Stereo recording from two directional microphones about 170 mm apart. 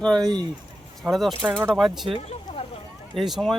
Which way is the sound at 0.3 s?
25° right (ahead or behind).